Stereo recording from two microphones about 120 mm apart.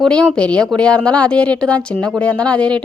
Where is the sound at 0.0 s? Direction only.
5° left (ahead or behind).